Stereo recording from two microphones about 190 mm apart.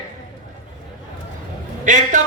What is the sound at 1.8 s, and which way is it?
Speech, 40° right (ahead or behind).